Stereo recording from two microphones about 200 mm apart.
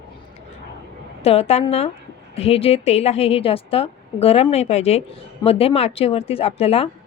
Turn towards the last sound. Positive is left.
turn(degrees=30)  # may be behind; listen again after turning